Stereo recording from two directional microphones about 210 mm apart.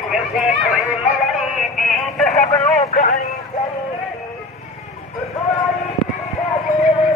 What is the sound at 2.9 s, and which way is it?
Speech, 40° left (ahead or behind).